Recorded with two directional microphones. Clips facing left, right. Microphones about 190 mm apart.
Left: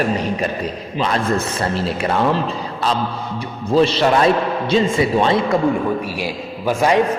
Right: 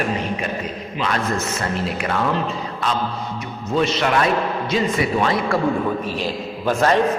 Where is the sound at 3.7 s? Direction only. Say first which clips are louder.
Left 5 dB; 30° left (ahead or behind).